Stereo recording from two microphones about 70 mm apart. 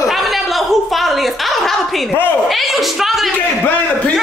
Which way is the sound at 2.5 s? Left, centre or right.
Centre.